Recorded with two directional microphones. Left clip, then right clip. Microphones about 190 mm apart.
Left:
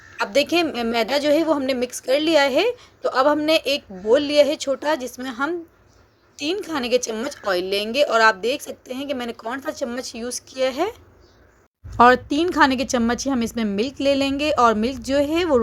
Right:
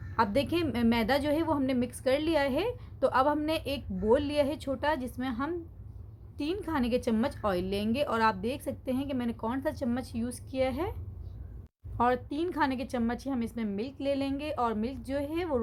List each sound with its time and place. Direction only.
0.2 s a woman's voice: 25° left (ahead or behind)
11.9 s a woman's voice: 30° left (ahead or behind)